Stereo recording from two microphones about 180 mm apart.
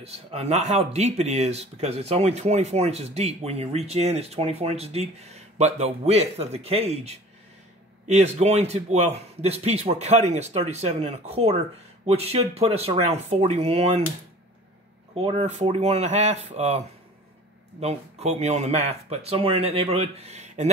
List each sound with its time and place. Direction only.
0.0 s speech: 35° right (ahead or behind)
15.1 s speech: 35° right (ahead or behind)